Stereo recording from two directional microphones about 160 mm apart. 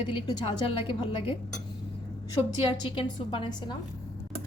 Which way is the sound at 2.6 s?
30° left (ahead or behind).